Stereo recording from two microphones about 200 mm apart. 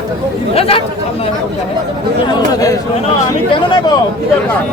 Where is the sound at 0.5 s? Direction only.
30° left (ahead or behind).